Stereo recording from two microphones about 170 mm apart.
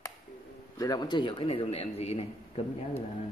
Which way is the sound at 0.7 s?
25° left (ahead or behind).